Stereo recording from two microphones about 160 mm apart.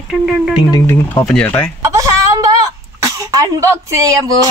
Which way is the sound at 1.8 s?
20° right (ahead or behind).